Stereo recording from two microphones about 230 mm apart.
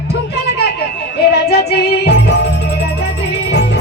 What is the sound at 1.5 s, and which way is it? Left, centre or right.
Music, left.